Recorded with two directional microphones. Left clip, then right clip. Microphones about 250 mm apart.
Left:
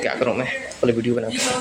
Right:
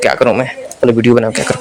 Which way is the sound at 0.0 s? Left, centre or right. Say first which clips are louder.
Right 10 dB; right.